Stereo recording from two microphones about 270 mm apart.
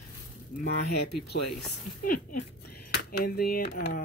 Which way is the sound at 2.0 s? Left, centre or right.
Left.